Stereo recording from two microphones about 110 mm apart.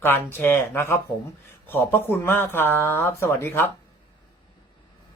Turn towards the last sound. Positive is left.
turn(degrees=20)  # may be behind; listen again after turning